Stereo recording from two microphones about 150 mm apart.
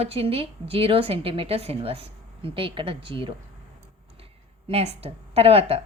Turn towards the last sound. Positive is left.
turn(degrees=-40)  # may be behind; listen again after turning